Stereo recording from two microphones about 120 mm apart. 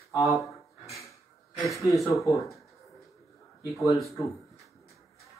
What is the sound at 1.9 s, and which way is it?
Speech, centre (ahead or behind).